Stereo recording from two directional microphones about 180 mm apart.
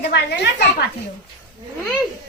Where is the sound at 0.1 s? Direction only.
65° left (ahead or behind).